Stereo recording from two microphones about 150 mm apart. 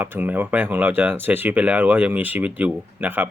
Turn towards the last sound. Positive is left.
turn(degrees=-10)  # may be behind; listen again after turning